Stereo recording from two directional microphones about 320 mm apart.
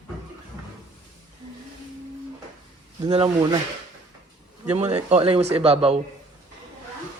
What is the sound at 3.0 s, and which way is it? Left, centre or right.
Speech, centre.